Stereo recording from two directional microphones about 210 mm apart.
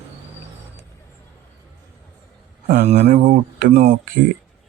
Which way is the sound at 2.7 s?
30° right (ahead or behind).